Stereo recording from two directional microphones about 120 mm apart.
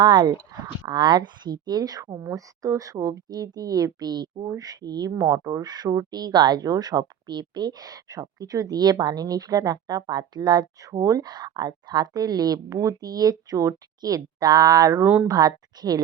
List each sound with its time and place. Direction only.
0.0 s speech: 40° right (ahead or behind)
15.0 s speech: 15° right (ahead or behind)
15.3 s speech: 30° right (ahead or behind)